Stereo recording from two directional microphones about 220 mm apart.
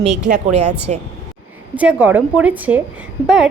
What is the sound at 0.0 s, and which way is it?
Speech, 30° right (ahead or behind).